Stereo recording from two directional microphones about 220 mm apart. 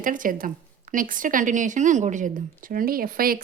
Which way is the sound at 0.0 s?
35° right (ahead or behind).